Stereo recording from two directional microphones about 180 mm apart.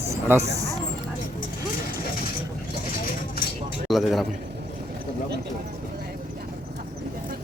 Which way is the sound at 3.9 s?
Centre (ahead or behind).